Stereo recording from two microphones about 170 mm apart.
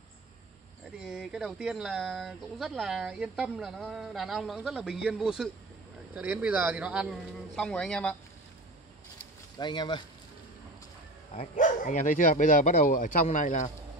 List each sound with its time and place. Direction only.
0.9 s speech: 5° right (ahead or behind)
7.5 s speech: 5° left (ahead or behind)
9.6 s speech: 25° left (ahead or behind)
11.3 s speech: 50° left (ahead or behind)